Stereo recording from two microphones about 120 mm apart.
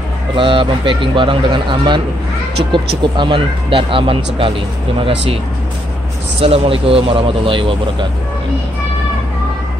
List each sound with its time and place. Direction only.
0.4 s speech: 45° right (ahead or behind)
6.4 s speech: 55° right (ahead or behind)